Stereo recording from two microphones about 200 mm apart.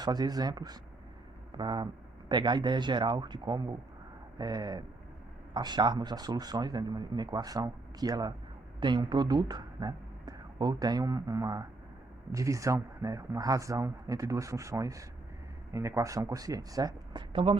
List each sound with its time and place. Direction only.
0.0 s a man's voice: 20° right (ahead or behind)